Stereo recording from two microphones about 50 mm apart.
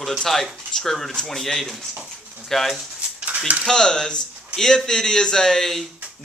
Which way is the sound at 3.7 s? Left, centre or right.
Centre.